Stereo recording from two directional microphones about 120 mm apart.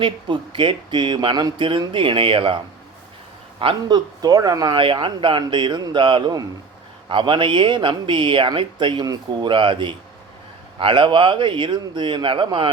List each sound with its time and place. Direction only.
0.0 s speech: 45° right (ahead or behind)
3.6 s speech: 50° right (ahead or behind)
3.9 s speech: 30° right (ahead or behind)
4.8 s speech: 45° right (ahead or behind)